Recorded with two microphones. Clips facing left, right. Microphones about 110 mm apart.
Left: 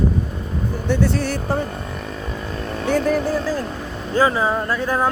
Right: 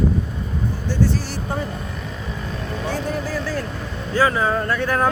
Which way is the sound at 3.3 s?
15° left (ahead or behind).